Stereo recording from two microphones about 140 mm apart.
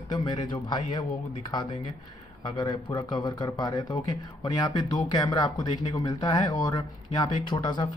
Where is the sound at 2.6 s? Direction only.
30° left (ahead or behind).